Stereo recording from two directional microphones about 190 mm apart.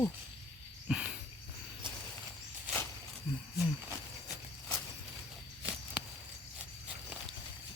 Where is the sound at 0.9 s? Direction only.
5° right (ahead or behind).